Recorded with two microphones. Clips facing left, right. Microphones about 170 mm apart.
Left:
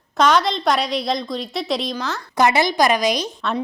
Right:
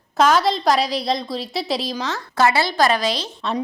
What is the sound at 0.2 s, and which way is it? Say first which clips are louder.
A woman's voice: right 1 dB; 5° right (ahead or behind).